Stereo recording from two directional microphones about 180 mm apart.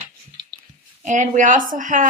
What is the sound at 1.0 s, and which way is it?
A woman's voice, 45° right (ahead or behind).